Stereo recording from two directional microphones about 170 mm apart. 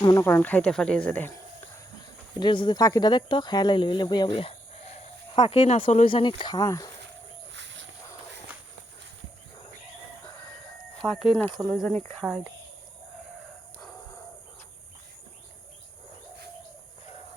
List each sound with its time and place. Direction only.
0.0 s speech: 20° left (ahead or behind)
2.4 s speech: 25° left (ahead or behind)
11.0 s speech: centre (ahead or behind)